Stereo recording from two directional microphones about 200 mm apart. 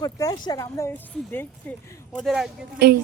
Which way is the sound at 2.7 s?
50° right (ahead or behind).